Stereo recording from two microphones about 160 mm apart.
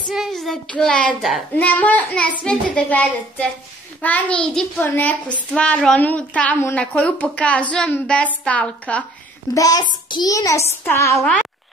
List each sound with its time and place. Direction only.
0.1 s child singing: centre (ahead or behind)
1.2 s a child's voice: 5° left (ahead or behind)
9.5 s a child's voice: 25° left (ahead or behind); by 11.4 s 5° left (ahead or behind)